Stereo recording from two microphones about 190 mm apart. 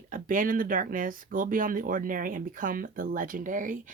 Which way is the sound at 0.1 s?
45° right (ahead or behind).